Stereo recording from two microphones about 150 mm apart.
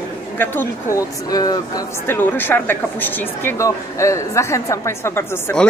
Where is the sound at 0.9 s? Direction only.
25° left (ahead or behind).